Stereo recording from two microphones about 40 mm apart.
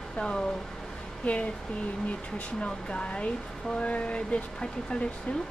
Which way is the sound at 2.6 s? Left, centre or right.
Left.